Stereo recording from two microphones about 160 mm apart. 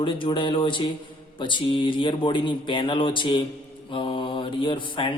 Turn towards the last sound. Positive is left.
turn(degrees=30)  # may be behind; listen again after turning